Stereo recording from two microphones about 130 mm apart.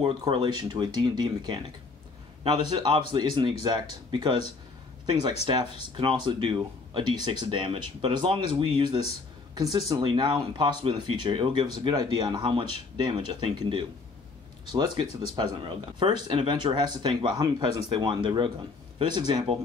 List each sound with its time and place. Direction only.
0.0 s speech: 35° right (ahead or behind)
5.5 s speech: 40° right (ahead or behind)